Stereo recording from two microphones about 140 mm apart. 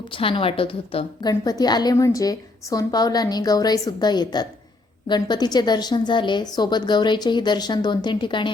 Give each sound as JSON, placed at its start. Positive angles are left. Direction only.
{"t": 0.1, "sound": "a woman's voice", "side_deg": 40}
{"t": 1.3, "sound": "a woman's voice", "side_deg": 25}